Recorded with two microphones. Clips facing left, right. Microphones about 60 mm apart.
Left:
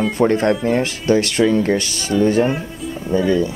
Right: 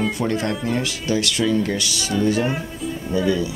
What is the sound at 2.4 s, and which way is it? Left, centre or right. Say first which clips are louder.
Music: left 3 dB; centre.